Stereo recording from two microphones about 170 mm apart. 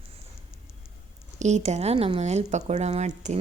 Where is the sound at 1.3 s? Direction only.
45° right (ahead or behind).